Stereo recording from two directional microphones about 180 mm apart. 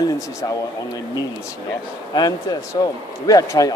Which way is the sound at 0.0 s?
20° left (ahead or behind).